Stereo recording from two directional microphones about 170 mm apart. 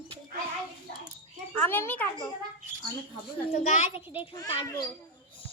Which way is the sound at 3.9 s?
30° left (ahead or behind).